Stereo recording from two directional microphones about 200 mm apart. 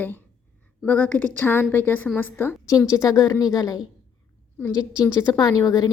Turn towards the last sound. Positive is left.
turn(degrees=20)  # may be behind; listen again after turning